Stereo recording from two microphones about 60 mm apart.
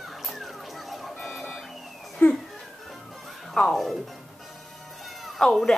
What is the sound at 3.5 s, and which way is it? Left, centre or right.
Speech, centre.